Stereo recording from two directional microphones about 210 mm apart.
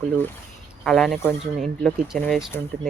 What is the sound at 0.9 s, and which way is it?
Speech, centre (ahead or behind).